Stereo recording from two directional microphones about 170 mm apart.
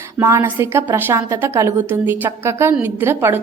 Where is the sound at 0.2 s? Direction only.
15° right (ahead or behind).